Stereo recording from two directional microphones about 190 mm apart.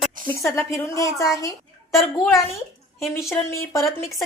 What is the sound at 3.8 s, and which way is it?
Speech, centre (ahead or behind).